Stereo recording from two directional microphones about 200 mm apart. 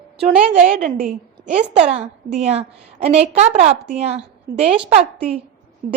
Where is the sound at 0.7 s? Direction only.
40° right (ahead or behind).